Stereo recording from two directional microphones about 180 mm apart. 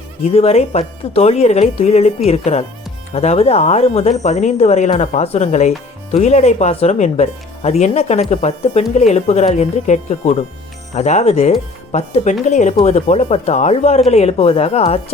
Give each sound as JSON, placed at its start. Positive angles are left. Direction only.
{"t": 0.3, "sound": "speech", "side_deg": 35}